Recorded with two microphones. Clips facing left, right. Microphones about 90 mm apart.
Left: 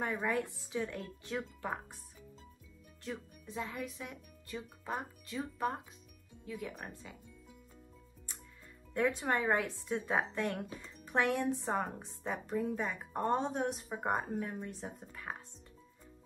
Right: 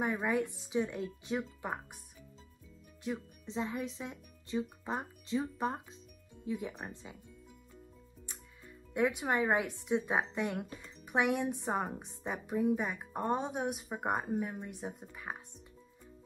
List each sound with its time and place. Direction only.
0.0 s speech: 15° right (ahead or behind)
3.0 s speech: 20° right (ahead or behind)
8.9 s speech: 15° right (ahead or behind)